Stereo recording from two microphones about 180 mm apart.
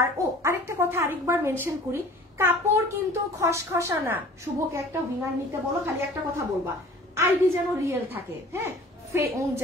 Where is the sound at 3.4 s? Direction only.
15° right (ahead or behind).